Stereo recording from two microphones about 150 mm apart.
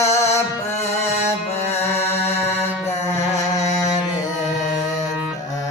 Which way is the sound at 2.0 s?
45° left (ahead or behind).